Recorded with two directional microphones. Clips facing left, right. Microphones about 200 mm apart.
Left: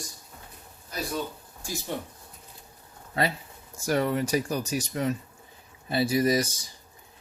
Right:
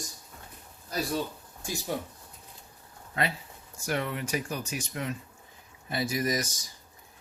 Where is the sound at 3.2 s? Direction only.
35° left (ahead or behind).